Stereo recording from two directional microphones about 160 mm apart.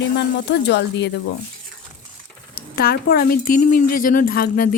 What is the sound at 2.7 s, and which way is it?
A woman's voice, 70° left (ahead or behind).